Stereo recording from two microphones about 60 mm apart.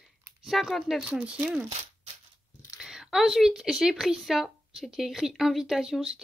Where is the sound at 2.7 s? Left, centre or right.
Centre.